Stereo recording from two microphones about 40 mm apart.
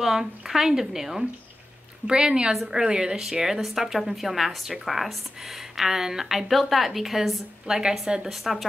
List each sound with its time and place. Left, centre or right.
0.0 s a woman's voice: centre
2.0 s speech: centre
2.5 s a woman's voice: centre
2.8 s a woman's voice: centre